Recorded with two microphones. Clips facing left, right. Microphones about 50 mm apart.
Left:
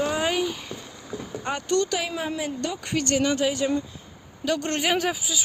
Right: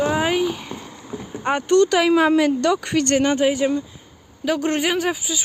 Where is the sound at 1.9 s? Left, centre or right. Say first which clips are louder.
Right 12 dB; right.